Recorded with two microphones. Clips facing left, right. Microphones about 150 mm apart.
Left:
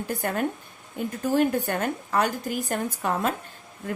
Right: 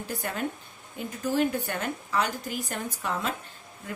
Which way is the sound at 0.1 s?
45° left (ahead or behind).